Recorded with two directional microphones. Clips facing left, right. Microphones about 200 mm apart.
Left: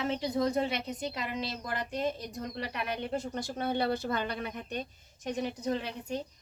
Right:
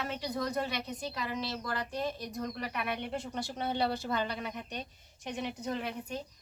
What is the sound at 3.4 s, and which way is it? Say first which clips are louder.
A woman's voice: even; 50° left (ahead or behind).